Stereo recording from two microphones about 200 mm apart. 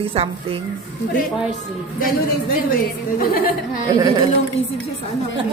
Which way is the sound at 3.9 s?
15° right (ahead or behind).